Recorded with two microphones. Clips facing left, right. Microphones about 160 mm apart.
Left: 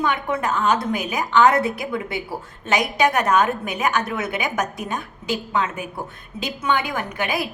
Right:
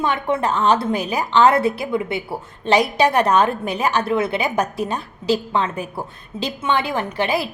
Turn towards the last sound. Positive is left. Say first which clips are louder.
# right 4 dB
turn(degrees=-30)  # may be behind; listen again after turning